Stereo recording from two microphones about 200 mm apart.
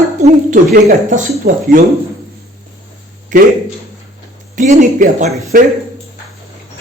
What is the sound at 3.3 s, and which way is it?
Speech, 40° right (ahead or behind).